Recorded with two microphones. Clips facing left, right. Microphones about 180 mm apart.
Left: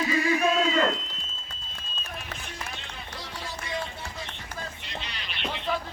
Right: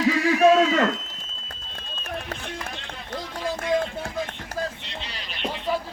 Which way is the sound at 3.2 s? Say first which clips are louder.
Right 10 dB; 50° right (ahead or behind).